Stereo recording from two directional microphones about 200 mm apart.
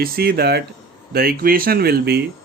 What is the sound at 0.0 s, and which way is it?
Speech, 50° right (ahead or behind).